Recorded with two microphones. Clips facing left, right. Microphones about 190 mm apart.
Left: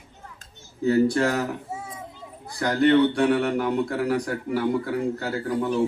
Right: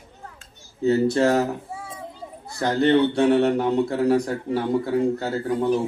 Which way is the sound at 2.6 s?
25° right (ahead or behind).